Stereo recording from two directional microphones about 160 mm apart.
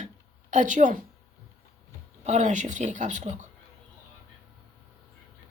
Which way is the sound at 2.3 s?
50° right (ahead or behind).